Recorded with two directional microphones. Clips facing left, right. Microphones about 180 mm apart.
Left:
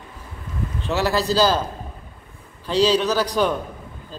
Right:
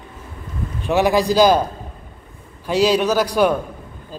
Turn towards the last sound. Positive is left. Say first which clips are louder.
# right 4 dB
turn(degrees=-10)  # may be behind; listen again after turning